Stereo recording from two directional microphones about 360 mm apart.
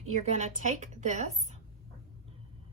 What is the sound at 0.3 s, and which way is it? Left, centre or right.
Speech, centre.